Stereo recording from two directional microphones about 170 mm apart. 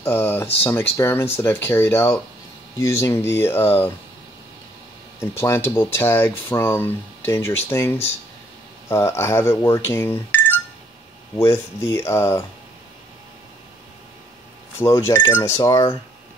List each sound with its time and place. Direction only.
0.0 s speech: 10° left (ahead or behind)
5.2 s speech: 15° left (ahead or behind)
14.8 s speech: 15° left (ahead or behind)